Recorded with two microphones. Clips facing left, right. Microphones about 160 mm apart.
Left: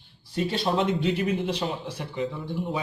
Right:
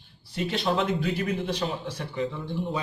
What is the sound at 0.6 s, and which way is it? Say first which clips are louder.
A man's voice: left 1 dB; 25° left (ahead or behind).